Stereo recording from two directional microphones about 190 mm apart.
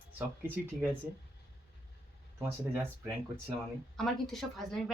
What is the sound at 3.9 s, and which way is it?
Speech, centre (ahead or behind).